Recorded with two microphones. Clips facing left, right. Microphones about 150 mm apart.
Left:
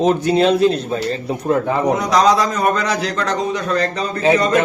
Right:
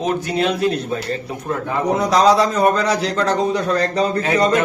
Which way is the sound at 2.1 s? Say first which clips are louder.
Right 2 dB; 30° right (ahead or behind).